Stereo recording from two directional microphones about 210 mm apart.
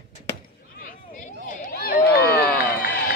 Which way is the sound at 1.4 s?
40° left (ahead or behind).